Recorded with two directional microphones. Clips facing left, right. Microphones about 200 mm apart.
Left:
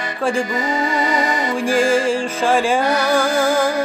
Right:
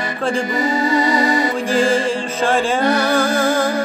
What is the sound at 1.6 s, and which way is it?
Music, 10° left (ahead or behind).